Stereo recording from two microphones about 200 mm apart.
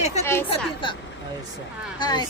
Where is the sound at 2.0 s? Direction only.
20° left (ahead or behind).